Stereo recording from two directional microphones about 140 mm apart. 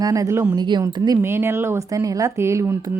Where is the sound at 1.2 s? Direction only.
15° right (ahead or behind).